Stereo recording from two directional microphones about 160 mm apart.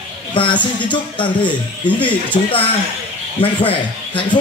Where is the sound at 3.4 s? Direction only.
35° left (ahead or behind).